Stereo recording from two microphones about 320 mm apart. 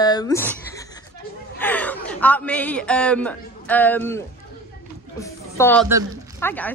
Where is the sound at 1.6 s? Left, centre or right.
Centre.